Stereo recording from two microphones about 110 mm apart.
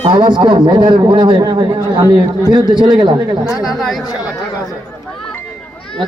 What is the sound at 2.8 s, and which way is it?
Speech, 45° right (ahead or behind).